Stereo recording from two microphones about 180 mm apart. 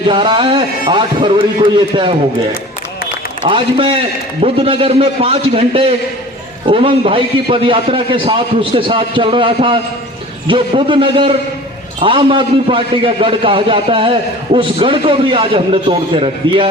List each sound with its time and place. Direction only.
0.1 s a man's voice: 25° right (ahead or behind)
3.4 s a man's voice: 30° right (ahead or behind)